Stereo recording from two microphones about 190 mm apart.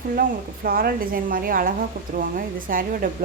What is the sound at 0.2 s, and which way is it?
Speech, 50° right (ahead or behind).